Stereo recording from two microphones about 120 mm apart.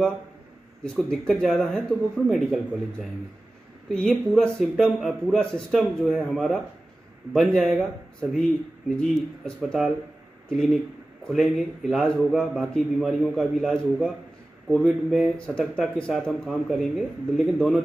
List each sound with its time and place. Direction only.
0.8 s a man's voice: 5° left (ahead or behind)